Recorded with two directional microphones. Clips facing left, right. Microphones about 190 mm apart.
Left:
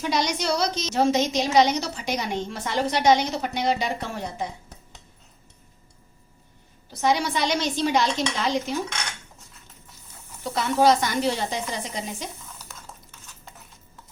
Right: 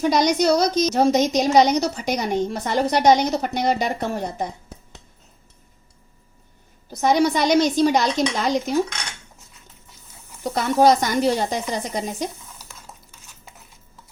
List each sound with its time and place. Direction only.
0.0 s a woman's voice: 45° right (ahead or behind)
7.0 s a woman's voice: 45° right (ahead or behind)
10.4 s a woman's voice: 45° right (ahead or behind)